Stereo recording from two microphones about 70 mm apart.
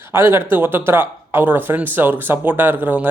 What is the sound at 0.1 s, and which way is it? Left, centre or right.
Speech, right.